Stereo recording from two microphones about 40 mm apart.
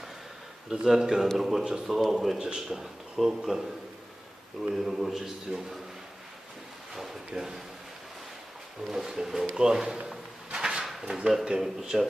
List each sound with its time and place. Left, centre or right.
0.9 s speech: centre
2.4 s speech: centre
4.9 s speech: centre
6.9 s speech: centre
8.9 s speech: centre
10.5 s a sound: centre
11.0 s speech: centre